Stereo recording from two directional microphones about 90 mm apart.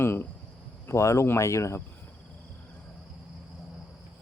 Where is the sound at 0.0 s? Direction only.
25° left (ahead or behind).